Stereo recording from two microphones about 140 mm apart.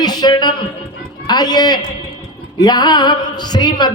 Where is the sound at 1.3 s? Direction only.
30° left (ahead or behind).